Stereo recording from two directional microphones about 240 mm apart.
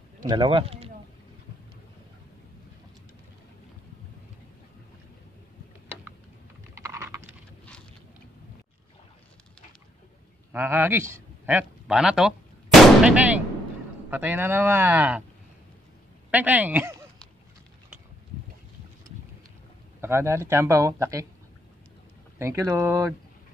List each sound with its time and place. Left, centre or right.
0.2 s speech: centre
6.7 s typing: centre
10.5 s speech: centre
16.3 s speech: centre
20.0 s speech: centre
22.4 s speech: centre